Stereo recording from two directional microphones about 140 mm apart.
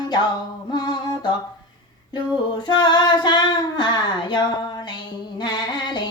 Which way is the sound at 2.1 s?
35° left (ahead or behind).